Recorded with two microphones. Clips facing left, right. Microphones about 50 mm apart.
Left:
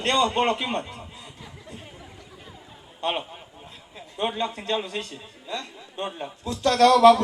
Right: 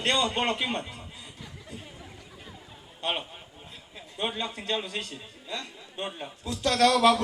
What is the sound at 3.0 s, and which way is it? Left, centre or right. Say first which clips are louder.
A man's voice: left 4 dB; centre.